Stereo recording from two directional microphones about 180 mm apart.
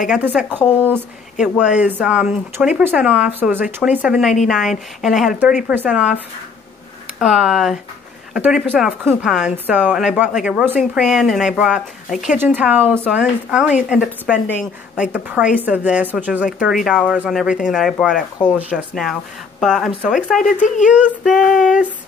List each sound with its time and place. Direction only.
0.2 s speech: 10° right (ahead or behind)
7.2 s speech: 5° right (ahead or behind)
20.6 s speech: 45° left (ahead or behind)
20.9 s speech: 5° right (ahead or behind)